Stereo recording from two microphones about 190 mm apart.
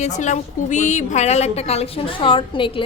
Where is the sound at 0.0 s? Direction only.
40° left (ahead or behind).